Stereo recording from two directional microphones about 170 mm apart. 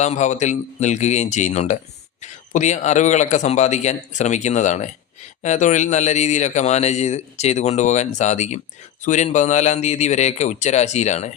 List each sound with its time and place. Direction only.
0.0 s a man's voice: 45° left (ahead or behind)